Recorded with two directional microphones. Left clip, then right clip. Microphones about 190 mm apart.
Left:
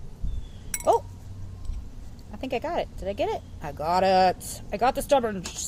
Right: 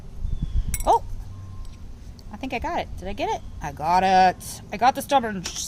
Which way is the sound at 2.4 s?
45° right (ahead or behind).